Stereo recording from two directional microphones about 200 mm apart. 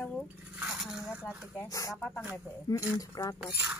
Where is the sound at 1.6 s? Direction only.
15° left (ahead or behind).